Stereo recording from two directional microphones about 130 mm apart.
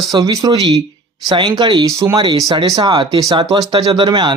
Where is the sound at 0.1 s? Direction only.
30° right (ahead or behind).